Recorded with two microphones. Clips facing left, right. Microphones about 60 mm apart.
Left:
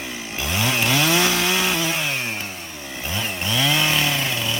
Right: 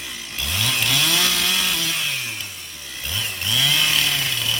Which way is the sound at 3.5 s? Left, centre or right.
Centre.